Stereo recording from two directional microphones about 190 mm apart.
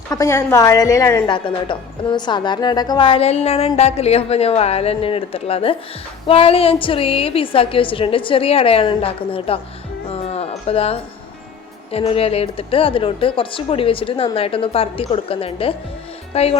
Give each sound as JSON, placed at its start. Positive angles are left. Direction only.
{"t": 0.1, "sound": "a woman's voice", "side_deg": 15}
{"t": 10.1, "sound": "music", "side_deg": 35}
{"t": 11.9, "sound": "a woman's voice", "side_deg": 30}